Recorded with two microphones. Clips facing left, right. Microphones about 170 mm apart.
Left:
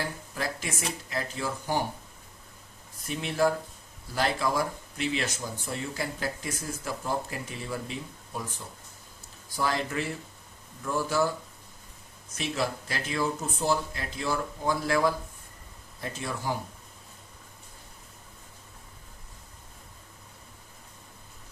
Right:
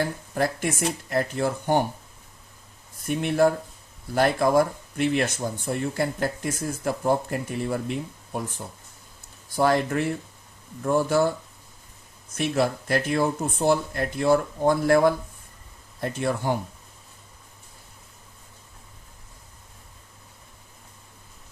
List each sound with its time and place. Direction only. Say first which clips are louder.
1.1 s speech: right 9 dB; 55° right (ahead or behind)
3.1 s speech: right 5 dB; 55° right (ahead or behind)
12.3 s speech: right 7 dB; 55° right (ahead or behind)